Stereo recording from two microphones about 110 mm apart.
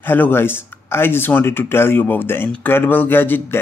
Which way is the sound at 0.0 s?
20° left (ahead or behind).